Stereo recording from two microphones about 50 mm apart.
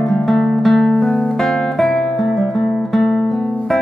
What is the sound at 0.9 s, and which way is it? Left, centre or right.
Music, left.